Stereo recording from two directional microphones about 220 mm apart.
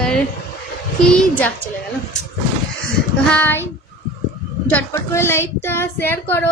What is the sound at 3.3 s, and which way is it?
Speech, 10° left (ahead or behind).